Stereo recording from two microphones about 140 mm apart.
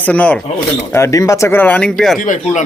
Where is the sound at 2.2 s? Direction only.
60° left (ahead or behind).